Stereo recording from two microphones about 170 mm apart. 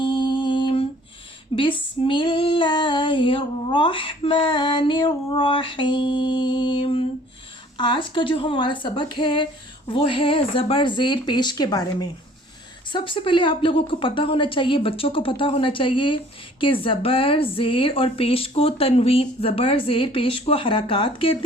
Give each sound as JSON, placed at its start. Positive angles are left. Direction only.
{"t": 0.0, "sound": "mantra", "side_deg": 25}
{"t": 1.5, "sound": "female singing", "side_deg": 30}
{"t": 12.9, "sound": "a woman's voice", "side_deg": 30}